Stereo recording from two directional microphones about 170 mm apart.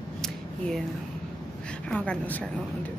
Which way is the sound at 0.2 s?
5° left (ahead or behind).